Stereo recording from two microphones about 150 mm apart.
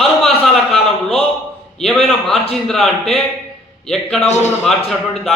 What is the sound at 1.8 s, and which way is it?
A man's voice, centre (ahead or behind).